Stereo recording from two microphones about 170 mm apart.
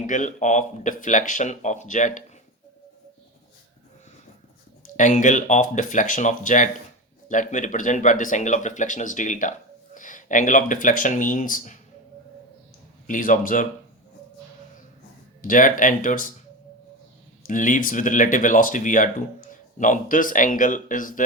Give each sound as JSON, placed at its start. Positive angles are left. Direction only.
{"t": 0.0, "sound": "speech", "side_deg": 45}
{"t": 4.8, "sound": "speech", "side_deg": 45}
{"t": 13.1, "sound": "speech", "side_deg": 50}
{"t": 15.4, "sound": "speech", "side_deg": 50}
{"t": 17.4, "sound": "speech", "side_deg": 50}